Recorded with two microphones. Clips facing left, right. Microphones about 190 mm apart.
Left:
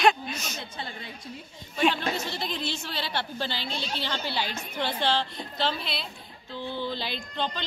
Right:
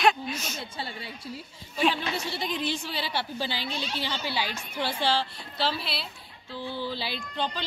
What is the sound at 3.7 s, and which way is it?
Speech, 35° left (ahead or behind).